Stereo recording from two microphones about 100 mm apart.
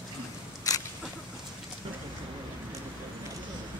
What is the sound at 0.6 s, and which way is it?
Single-lens reflex camera, 35° left (ahead or behind).